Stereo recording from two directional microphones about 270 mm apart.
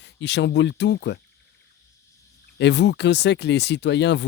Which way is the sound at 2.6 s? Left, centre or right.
Left.